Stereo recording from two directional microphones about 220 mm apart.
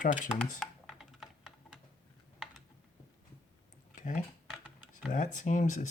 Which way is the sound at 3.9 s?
35° left (ahead or behind).